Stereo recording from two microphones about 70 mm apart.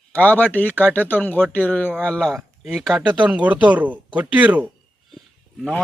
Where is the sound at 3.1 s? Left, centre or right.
Centre.